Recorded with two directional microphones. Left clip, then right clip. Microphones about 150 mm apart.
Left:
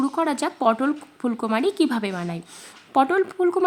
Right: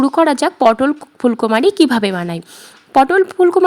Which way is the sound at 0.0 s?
45° right (ahead or behind).